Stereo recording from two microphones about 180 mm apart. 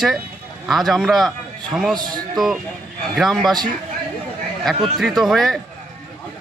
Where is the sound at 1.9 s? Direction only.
25° right (ahead or behind).